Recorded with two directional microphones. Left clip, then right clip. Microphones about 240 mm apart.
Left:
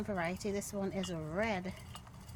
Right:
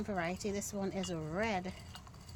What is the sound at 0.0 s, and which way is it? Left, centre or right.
Speech, centre.